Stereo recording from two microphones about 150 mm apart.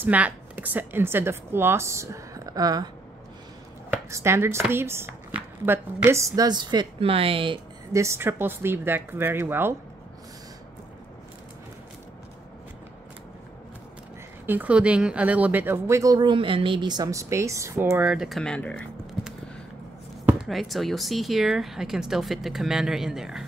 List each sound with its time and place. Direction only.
0.0 s a woman's voice: 10° right (ahead or behind)
3.9 s speech: 15° right (ahead or behind); by 7.5 s 35° right (ahead or behind)
7.9 s speech: 20° right (ahead or behind)
14.4 s speech: 10° right (ahead or behind)
18.0 s speech: 5° right (ahead or behind)
20.2 s speech: centre (ahead or behind)